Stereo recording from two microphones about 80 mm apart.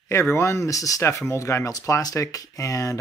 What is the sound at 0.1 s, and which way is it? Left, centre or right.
Speech, left.